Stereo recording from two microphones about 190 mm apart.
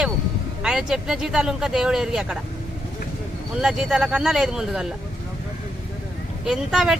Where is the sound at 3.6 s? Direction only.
5° right (ahead or behind).